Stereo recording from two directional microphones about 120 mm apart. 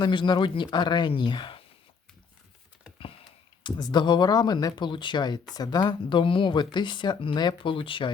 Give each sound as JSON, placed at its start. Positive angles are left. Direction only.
{"t": 0.0, "sound": "speech", "side_deg": 40}
{"t": 3.6, "sound": "speech", "side_deg": 40}